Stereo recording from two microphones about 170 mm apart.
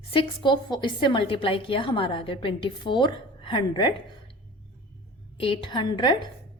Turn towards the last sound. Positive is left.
turn(degrees=25)  # may be behind; listen again after turning